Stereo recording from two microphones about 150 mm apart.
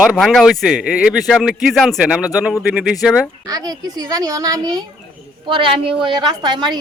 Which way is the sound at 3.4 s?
25° right (ahead or behind).